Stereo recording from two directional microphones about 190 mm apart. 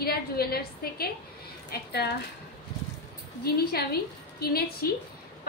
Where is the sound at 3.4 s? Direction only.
55° left (ahead or behind).